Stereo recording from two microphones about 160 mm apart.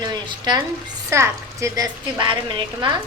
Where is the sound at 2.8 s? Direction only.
30° right (ahead or behind).